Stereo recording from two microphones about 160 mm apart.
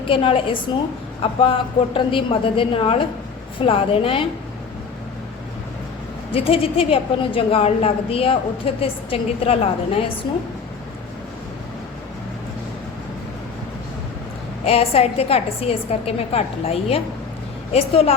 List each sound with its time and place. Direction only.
0.1 s a woman's voice: 35° left (ahead or behind)
6.3 s a woman's voice: 35° left (ahead or behind)
14.6 s a woman's voice: 40° left (ahead or behind)